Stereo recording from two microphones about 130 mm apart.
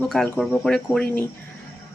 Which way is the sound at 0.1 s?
Centre (ahead or behind).